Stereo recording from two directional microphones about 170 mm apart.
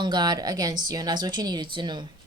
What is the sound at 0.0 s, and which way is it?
Speech, 25° right (ahead or behind).